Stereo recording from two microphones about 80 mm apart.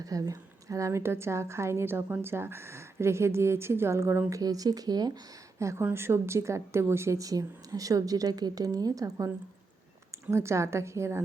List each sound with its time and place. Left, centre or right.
0.0 s a woman's voice: right
4.3 s speech: right
5.5 s a woman's voice: right